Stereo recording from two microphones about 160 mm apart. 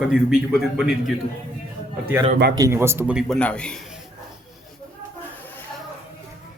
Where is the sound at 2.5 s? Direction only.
20° right (ahead or behind).